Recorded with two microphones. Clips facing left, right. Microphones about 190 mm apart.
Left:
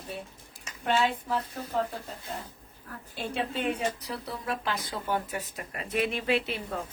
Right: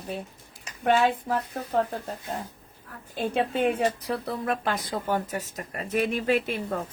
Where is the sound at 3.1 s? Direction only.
55° right (ahead or behind).